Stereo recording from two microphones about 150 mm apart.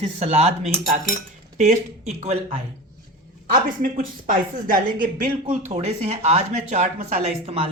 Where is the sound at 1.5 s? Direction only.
50° right (ahead or behind).